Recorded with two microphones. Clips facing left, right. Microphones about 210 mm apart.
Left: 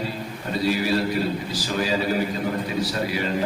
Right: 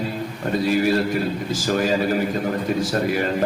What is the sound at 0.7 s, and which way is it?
A man's voice, 50° right (ahead or behind).